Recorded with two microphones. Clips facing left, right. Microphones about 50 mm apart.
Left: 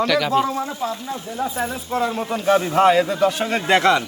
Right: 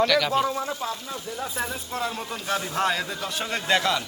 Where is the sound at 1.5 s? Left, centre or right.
Centre.